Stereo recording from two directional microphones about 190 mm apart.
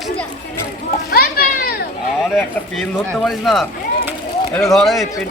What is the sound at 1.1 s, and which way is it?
Children playing, 50° left (ahead or behind).